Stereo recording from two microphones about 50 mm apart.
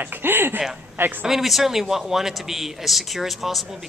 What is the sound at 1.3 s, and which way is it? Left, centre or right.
Speech, centre.